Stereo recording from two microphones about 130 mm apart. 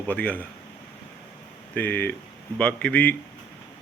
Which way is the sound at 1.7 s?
15° left (ahead or behind).